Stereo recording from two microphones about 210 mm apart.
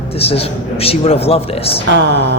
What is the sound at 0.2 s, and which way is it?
A man's voice, 30° left (ahead or behind).